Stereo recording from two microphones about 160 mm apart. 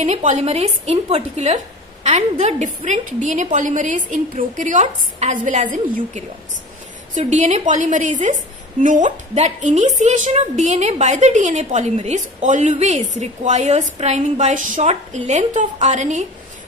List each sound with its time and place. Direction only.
0.0 s a woman's voice: 45° right (ahead or behind)